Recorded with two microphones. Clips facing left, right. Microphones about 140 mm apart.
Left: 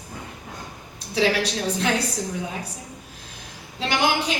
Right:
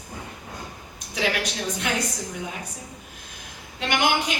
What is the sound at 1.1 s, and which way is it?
Speech, 30° left (ahead or behind).